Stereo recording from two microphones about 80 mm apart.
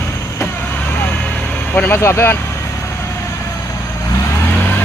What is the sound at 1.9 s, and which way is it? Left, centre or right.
Speech, left.